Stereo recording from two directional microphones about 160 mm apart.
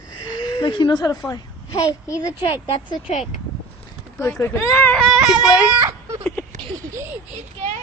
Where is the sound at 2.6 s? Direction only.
40° left (ahead or behind).